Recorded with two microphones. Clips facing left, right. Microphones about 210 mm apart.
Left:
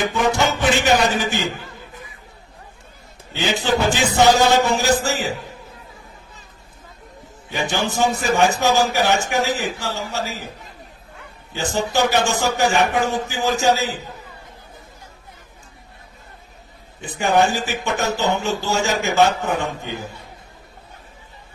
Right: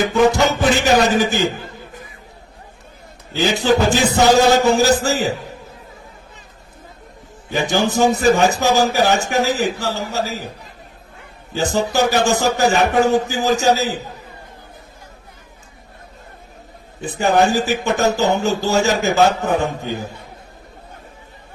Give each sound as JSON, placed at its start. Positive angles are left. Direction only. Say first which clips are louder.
{"t": 0.0, "sound": "speech", "louder": "right 5 dB", "side_deg": -40}
{"t": 3.3, "sound": "speech", "louder": "right 4 dB", "side_deg": -40}
{"t": 7.5, "sound": "speech", "louder": "right 5 dB", "side_deg": -40}
{"t": 11.5, "sound": "speech", "louder": "right 3 dB", "side_deg": -40}
{"t": 17.2, "sound": "speech", "louder": "right 3 dB", "side_deg": -40}